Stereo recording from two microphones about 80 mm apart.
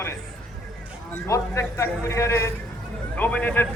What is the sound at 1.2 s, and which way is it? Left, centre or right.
A man's voice, left.